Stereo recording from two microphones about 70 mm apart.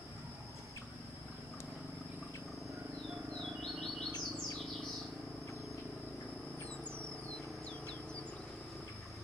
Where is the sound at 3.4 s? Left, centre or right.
Centre.